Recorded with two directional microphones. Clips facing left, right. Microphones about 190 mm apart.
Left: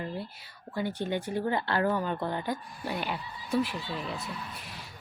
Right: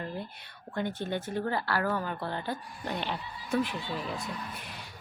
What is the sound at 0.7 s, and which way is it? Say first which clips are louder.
A woman's voice: left 1 dB; 10° left (ahead or behind).